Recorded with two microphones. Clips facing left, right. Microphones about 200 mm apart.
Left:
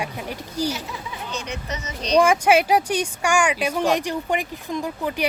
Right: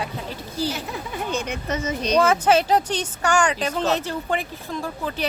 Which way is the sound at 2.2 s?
10° left (ahead or behind).